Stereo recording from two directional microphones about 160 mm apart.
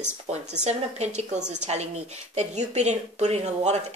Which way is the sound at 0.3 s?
45° right (ahead or behind).